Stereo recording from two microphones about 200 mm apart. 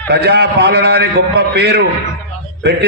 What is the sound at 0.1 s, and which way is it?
A man's voice, 55° right (ahead or behind).